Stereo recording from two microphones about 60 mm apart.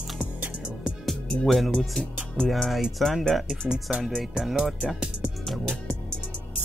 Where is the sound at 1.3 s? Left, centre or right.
Centre.